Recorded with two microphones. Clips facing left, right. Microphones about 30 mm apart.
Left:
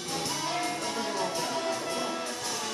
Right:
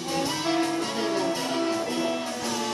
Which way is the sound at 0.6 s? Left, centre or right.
Right.